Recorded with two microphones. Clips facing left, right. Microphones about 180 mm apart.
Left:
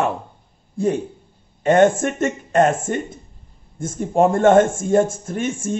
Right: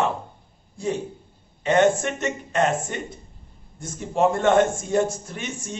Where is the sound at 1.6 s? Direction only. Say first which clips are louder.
Left 4 dB; 50° left (ahead or behind).